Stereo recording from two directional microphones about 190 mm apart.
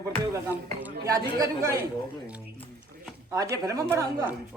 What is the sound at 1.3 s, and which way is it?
Speech, 15° right (ahead or behind).